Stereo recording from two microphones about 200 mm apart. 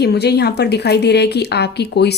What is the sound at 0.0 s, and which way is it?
Speech, 55° left (ahead or behind).